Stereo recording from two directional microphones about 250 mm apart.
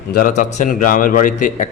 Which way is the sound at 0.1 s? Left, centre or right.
Left.